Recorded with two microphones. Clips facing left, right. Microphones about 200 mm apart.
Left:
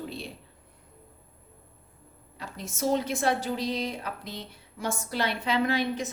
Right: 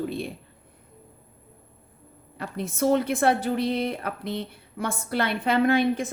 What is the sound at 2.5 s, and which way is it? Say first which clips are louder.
A woman's voice: right 5 dB; 60° right (ahead or behind).